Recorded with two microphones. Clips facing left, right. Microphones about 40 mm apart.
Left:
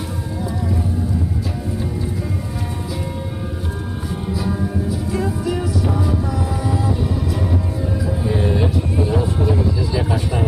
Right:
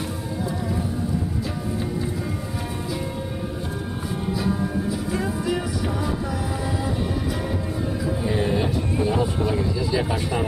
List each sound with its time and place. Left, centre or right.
4.3 s music: centre
9.0 s music: centre
9.8 s vehicle: centre